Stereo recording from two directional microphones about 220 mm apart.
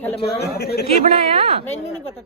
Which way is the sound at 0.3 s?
45° left (ahead or behind).